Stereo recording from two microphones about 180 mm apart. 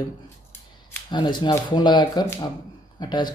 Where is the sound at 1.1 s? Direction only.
25° left (ahead or behind).